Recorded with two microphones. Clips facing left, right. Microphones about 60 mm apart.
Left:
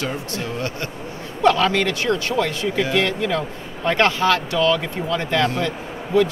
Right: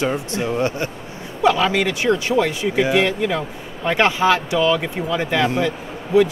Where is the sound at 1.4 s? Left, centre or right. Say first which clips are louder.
Even; centre.